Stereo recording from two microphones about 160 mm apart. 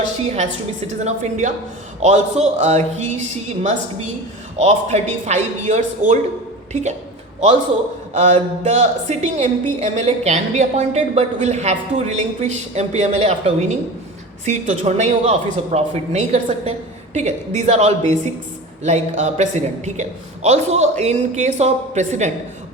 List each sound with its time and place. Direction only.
0.9 s a woman's voice: 45° right (ahead or behind)
8.1 s a woman's voice: 45° right (ahead or behind)